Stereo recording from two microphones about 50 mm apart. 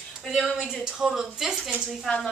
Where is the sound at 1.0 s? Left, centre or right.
Centre.